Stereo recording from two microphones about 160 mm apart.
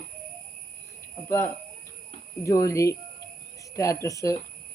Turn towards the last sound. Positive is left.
turn(degrees=20)  # may be behind; listen again after turning